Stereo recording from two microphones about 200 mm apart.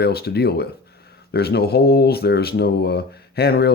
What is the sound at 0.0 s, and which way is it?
Speech, 50° left (ahead or behind).